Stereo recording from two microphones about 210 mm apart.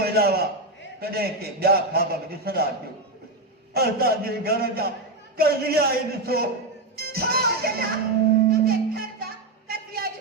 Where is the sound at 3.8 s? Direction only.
45° right (ahead or behind).